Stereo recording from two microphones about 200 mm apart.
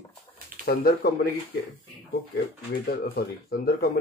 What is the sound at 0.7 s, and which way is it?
Speech, 50° left (ahead or behind).